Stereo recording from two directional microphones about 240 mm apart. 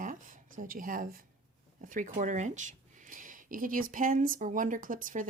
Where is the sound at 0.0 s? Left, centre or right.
Right.